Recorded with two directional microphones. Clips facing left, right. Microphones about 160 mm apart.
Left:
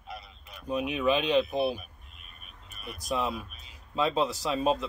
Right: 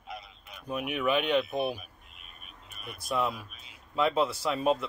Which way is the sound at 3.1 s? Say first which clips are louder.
Even; 20° left (ahead or behind).